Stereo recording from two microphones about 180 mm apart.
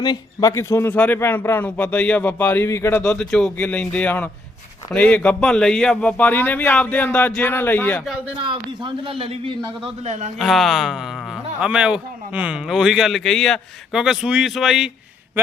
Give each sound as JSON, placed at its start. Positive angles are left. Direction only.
{"t": 0.0, "sound": "a man's voice", "side_deg": 25}
{"t": 3.0, "sound": "a man's voice", "side_deg": 5}
{"t": 8.4, "sound": "a man's voice", "side_deg": -30}
{"t": 10.3, "sound": "speech", "side_deg": 0}